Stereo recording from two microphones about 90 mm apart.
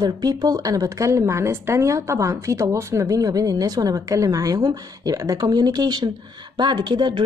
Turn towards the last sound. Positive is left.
turn(degrees=-55)  # may be behind; listen again after turning